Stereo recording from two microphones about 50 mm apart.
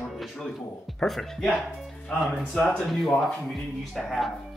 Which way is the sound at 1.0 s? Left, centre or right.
Centre.